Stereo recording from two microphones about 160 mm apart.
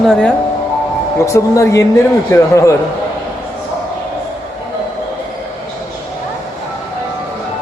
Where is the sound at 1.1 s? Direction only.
20° left (ahead or behind).